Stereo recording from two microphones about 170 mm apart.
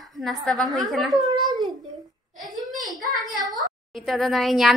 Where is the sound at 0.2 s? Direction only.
Centre (ahead or behind).